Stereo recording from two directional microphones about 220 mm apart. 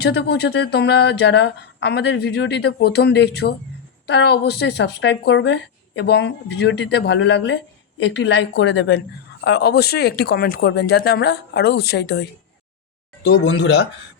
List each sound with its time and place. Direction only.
0.0 s speech: 50° left (ahead or behind)